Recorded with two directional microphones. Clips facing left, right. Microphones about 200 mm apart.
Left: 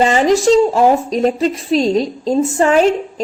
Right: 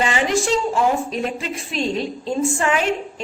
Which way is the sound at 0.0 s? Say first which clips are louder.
Left 8 dB; 40° left (ahead or behind).